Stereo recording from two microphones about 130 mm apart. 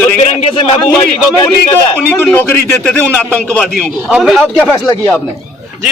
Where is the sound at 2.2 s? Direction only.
15° left (ahead or behind); by 4.4 s centre (ahead or behind).